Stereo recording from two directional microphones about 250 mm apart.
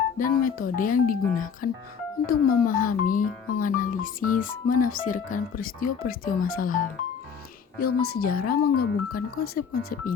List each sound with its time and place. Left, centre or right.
0.2 s speech: left
8.0 s speech: left